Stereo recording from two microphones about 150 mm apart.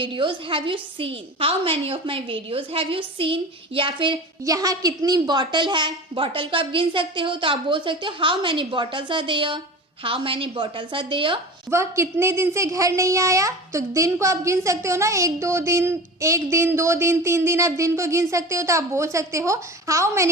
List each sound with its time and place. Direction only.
0.0 s a woman's voice: 35° right (ahead or behind)
11.7 s a woman's voice: 20° right (ahead or behind)